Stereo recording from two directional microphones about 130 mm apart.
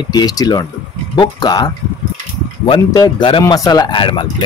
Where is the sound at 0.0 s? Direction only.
30° left (ahead or behind).